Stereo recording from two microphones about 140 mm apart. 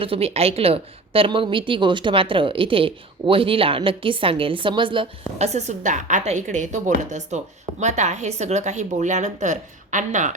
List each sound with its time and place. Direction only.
0.0 s a woman's voice: 45° right (ahead or behind)
5.4 s a woman's voice: 55° right (ahead or behind)